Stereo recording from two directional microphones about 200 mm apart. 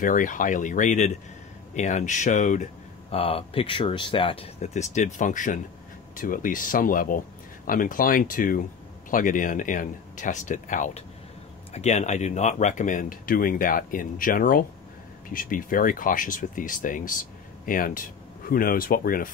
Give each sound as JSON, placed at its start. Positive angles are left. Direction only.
{"t": 0.0, "sound": "speech", "side_deg": 40}